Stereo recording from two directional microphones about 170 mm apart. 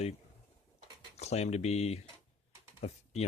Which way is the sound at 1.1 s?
40° left (ahead or behind).